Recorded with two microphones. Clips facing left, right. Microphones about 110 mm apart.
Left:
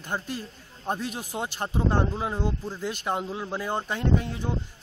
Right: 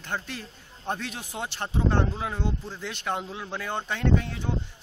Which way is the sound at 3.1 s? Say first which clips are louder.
Left 1 dB; 20° left (ahead or behind).